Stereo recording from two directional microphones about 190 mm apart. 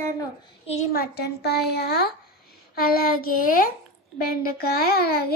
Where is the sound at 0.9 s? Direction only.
60° left (ahead or behind).